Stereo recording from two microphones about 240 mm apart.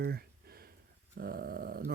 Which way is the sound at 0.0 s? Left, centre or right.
Right.